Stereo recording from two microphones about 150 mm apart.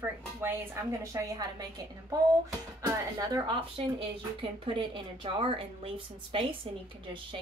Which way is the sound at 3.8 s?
40° right (ahead or behind).